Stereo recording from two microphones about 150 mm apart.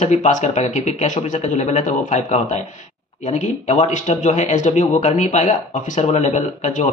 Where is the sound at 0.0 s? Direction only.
50° left (ahead or behind).